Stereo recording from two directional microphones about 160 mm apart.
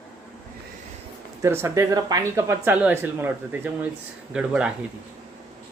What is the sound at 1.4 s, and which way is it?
Speech, 15° right (ahead or behind).